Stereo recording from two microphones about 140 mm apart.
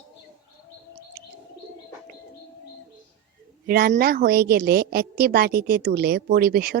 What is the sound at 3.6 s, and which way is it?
A woman's voice, 90° right.